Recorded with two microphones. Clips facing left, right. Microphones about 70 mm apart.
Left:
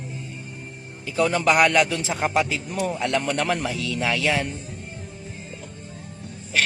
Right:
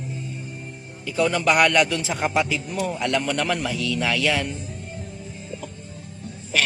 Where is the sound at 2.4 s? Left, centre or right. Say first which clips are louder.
Even; left.